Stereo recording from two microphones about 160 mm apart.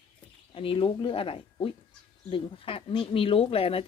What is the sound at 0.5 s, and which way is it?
Speech, 35° left (ahead or behind).